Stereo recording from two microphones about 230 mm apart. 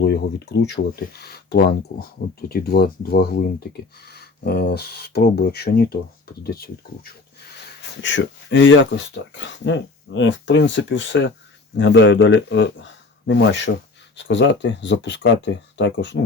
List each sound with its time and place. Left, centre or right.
0.0 s speech: left
7.8 s speech: left